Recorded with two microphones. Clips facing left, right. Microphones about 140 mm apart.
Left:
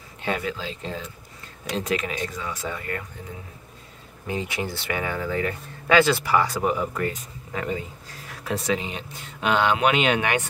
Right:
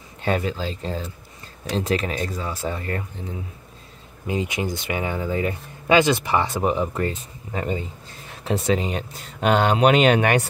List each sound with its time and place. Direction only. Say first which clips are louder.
0.2 s speech: right 4 dB; 35° right (ahead or behind)
4.3 s speech: right 3 dB; 15° right (ahead or behind)
8.7 s speech: right 5 dB; 45° right (ahead or behind)